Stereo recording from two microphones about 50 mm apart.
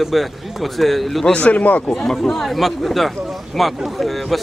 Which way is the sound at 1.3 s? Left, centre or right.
Left.